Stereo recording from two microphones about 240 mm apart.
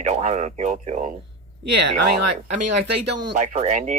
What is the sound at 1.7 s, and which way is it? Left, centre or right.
Speech, right.